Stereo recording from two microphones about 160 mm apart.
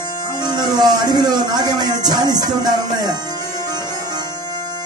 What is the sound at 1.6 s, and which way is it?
Music, 25° right (ahead or behind).